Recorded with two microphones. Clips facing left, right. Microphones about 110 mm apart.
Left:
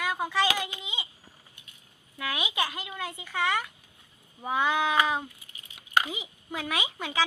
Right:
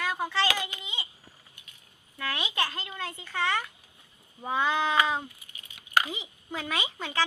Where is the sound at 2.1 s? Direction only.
10° left (ahead or behind).